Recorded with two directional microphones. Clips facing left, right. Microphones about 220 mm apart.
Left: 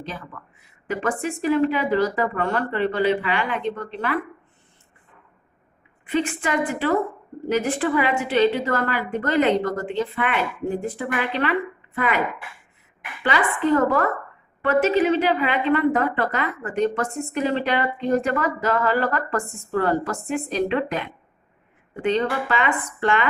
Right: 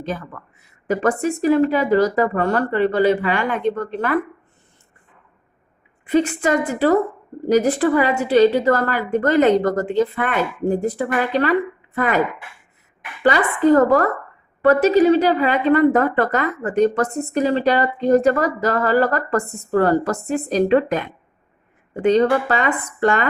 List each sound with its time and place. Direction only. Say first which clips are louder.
0.9 s a woman's voice: right 6 dB; 40° right (ahead or behind)
6.1 s a woman's voice: right 6 dB; 40° right (ahead or behind)
13.2 s a woman's voice: right 6 dB; 40° right (ahead or behind)